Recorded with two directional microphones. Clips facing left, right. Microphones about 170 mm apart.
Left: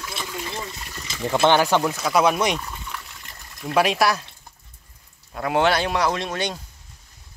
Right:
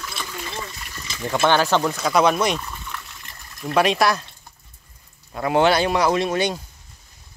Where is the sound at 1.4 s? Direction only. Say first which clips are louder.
Even; 15° left (ahead or behind).